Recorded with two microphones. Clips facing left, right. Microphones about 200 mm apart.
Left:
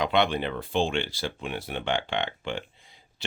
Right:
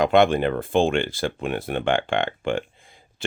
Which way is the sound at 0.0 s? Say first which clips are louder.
Right 7 dB; 50° right (ahead or behind).